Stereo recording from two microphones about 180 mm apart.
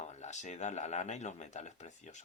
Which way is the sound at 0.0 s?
40° left (ahead or behind).